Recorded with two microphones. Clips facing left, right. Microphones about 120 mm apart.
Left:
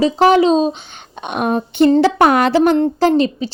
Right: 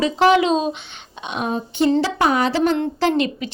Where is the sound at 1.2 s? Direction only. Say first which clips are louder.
Left 6 dB; 55° left (ahead or behind).